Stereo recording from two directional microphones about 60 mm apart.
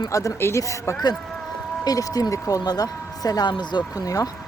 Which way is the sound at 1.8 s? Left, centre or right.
Left.